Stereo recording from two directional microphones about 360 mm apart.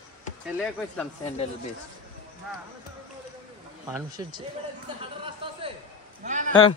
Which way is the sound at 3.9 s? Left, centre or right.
Centre.